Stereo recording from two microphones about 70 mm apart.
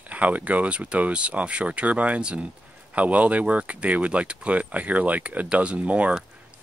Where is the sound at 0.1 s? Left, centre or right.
Right.